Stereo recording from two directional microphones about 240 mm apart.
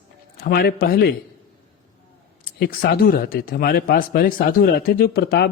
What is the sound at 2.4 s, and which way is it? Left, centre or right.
A man's voice, left.